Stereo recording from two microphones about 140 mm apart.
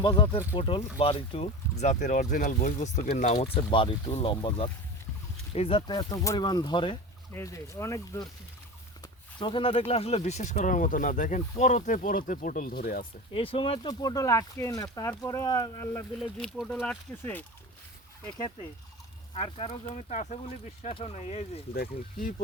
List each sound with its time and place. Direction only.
0.0 s speech: 30° left (ahead or behind); by 3.4 s 85° left
3.4 s speech: 40° left (ahead or behind)
7.3 s speech: 20° left (ahead or behind)
9.4 s speech: 35° left (ahead or behind); by 13.1 s 90° left
13.3 s speech: 40° left (ahead or behind)
16.4 s speech: 5° left (ahead or behind)
19.3 s speech: 45° left (ahead or behind)
21.7 s speech: 85° left